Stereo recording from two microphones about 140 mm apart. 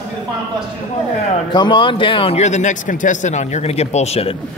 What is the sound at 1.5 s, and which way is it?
Speech, 35° left (ahead or behind).